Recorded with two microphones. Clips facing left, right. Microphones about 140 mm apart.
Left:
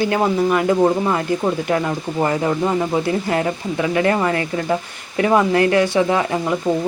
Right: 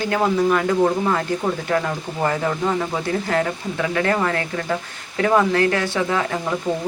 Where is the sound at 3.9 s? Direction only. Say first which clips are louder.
Left 3 dB; 20° left (ahead or behind).